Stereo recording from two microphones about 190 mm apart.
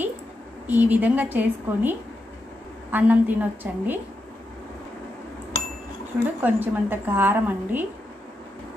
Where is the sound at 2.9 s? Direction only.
10° right (ahead or behind).